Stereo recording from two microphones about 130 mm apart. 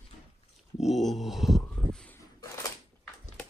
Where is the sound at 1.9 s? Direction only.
10° left (ahead or behind).